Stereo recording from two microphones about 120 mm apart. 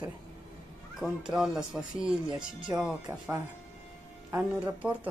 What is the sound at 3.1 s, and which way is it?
Speech, 15° right (ahead or behind).